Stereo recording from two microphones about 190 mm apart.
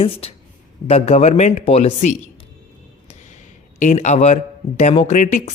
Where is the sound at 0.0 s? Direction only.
30° left (ahead or behind).